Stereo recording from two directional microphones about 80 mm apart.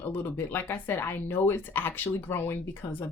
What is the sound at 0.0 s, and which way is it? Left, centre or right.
Speech, left.